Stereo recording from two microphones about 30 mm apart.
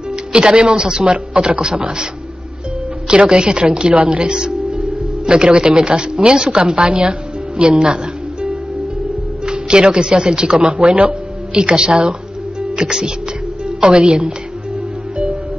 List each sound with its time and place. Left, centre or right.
0.1 s speech: right
1.0 s speech: right
3.1 s speech: right
4.3 s speech: right
6.7 s music: right
9.5 s speech: right
10.6 s speech: right
11.6 s a woman's voice: right